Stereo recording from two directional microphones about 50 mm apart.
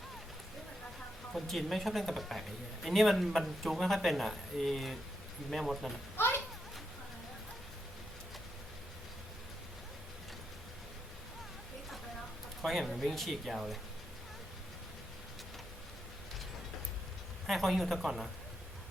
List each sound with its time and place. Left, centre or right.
1.3 s speech: centre
6.1 s children playing: left
12.6 s speech: centre
17.4 s speech: centre